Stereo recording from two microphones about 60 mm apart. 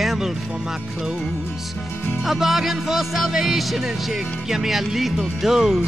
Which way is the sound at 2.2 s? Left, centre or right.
Centre.